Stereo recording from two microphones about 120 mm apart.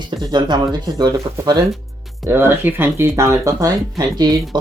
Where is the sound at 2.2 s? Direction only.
15° right (ahead or behind); by 4.3 s 35° right (ahead or behind).